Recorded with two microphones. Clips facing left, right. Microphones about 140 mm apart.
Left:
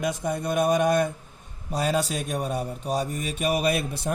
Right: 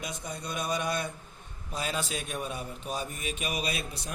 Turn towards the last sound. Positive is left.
turn(degrees=55)  # may be behind; listen again after turning